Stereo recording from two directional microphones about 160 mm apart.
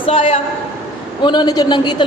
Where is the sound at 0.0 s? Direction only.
35° left (ahead or behind).